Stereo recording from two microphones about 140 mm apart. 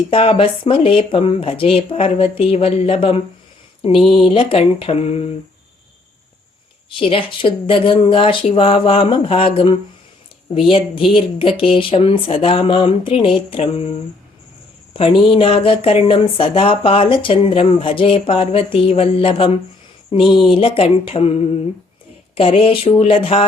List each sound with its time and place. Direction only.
0.1 s speech: 40° left (ahead or behind)
4.3 s speech: 45° left (ahead or behind)
6.9 s speech: 40° left (ahead or behind)
14.9 s speech: 40° left (ahead or behind)
22.4 s speech: 40° left (ahead or behind)